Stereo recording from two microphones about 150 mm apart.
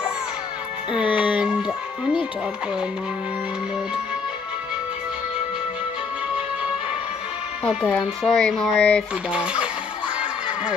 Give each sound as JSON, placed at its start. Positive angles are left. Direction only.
{"t": 0.9, "sound": "music", "side_deg": -10}
{"t": 8.2, "sound": "speech", "side_deg": 5}
{"t": 9.3, "sound": "speech", "side_deg": -5}